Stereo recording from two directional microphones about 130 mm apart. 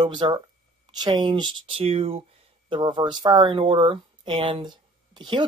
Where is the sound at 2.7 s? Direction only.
35° right (ahead or behind).